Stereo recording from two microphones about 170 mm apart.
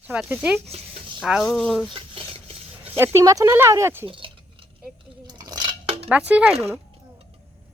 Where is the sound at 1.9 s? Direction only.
30° right (ahead or behind).